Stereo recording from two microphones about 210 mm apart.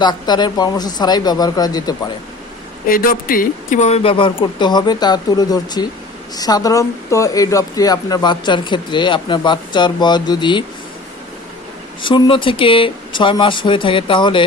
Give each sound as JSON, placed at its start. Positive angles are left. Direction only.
{"t": 0.0, "sound": "speech", "side_deg": 20}
{"t": 2.8, "sound": "speech", "side_deg": 40}
{"t": 12.0, "sound": "speech", "side_deg": 25}